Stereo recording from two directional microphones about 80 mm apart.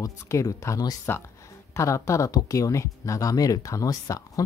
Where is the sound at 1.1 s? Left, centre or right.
Left.